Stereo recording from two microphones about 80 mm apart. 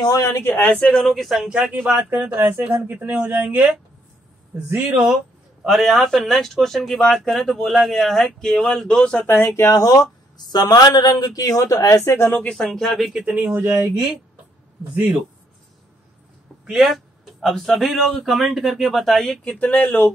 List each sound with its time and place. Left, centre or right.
0.0 s speech: left
0.3 s speech: left; by 1.5 s centre
1.7 s speech: right
3.4 s speech: centre
4.8 s speech: centre
5.6 s speech: centre
9.3 s speech: left
9.7 s speech: left
12.3 s speech: centre
13.1 s speech: centre
16.6 s speech: centre
19.6 s speech: centre